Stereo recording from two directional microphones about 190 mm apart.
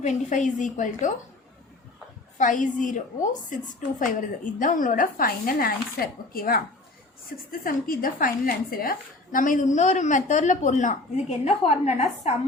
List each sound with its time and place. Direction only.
0.0 s speech: 40° left (ahead or behind)
2.4 s a woman's voice: 40° left (ahead or behind)